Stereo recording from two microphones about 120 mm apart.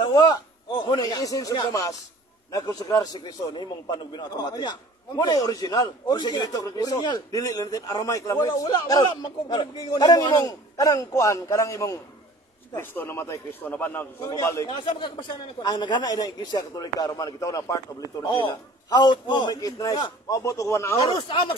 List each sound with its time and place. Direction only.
0.0 s a man's voice: 35° left (ahead or behind); by 14.0 s 15° left (ahead or behind)
14.2 s a man's voice: 25° left (ahead or behind)
14.7 s a man's voice: 40° left (ahead or behind)
18.3 s a man's voice: 40° left (ahead or behind); by 21.0 s 25° left (ahead or behind)
21.1 s speech: 40° left (ahead or behind)